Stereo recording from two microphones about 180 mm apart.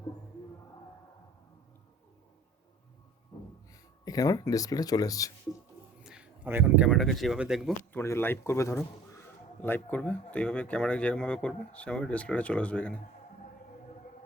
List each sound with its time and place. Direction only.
4.0 s speech: 20° left (ahead or behind)
6.0 s speech: 5° right (ahead or behind)
7.9 s speech: 15° left (ahead or behind)